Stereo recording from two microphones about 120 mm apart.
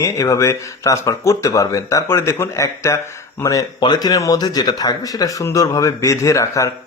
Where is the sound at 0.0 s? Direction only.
25° left (ahead or behind).